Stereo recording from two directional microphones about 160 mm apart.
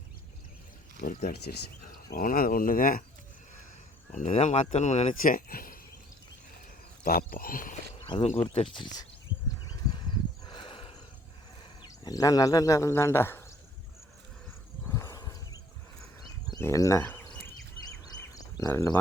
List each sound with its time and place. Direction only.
0.9 s speech: 65° left (ahead or behind)
4.1 s speech: 45° left (ahead or behind); by 5.8 s 65° left (ahead or behind)
7.0 s speech: 65° left (ahead or behind)
8.0 s speech: 35° left (ahead or behind)
9.9 s a sound: 30° left (ahead or behind)
12.0 s speech: 20° left (ahead or behind)
14.8 s horse: 20° left (ahead or behind)
16.5 s speech: 20° left (ahead or behind)
18.0 s a sound: 25° left (ahead or behind)